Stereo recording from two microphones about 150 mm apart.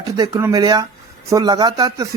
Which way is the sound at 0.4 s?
25° right (ahead or behind).